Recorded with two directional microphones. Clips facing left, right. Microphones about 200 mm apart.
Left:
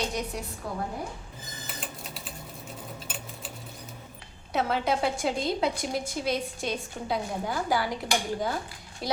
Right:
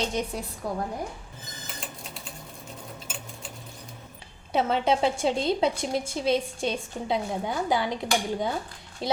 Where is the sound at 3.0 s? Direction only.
5° left (ahead or behind).